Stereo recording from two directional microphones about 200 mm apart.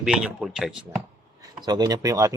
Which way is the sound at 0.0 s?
5° right (ahead or behind).